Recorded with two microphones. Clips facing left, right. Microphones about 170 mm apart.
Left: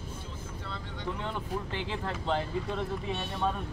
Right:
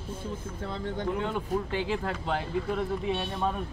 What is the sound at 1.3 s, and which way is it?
Speech, 15° right (ahead or behind).